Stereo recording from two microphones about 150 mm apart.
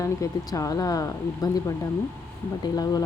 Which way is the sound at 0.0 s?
20° left (ahead or behind).